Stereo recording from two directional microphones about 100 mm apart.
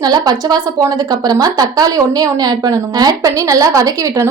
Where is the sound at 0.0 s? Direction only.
40° right (ahead or behind).